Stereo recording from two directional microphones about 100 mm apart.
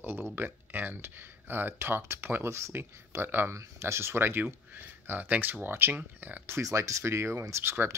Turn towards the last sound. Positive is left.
turn(degrees=-25)  # may be behind; listen again after turning